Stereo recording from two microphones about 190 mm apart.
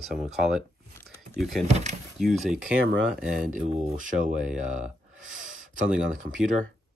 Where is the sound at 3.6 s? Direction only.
40° right (ahead or behind).